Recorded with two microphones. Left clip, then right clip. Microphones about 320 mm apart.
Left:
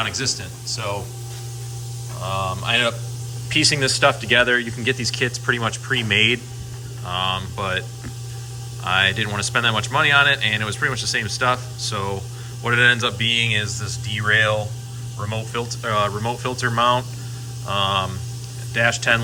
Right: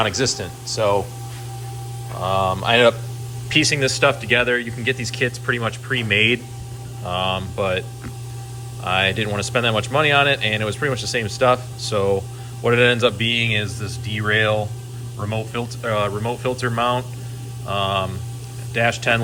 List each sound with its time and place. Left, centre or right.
0.0 s speech: centre
2.2 s speech: centre